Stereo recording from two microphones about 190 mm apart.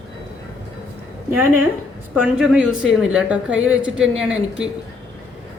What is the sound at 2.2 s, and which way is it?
Speech, 5° right (ahead or behind).